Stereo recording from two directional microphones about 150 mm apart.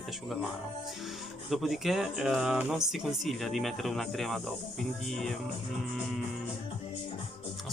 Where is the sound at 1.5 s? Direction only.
Centre (ahead or behind).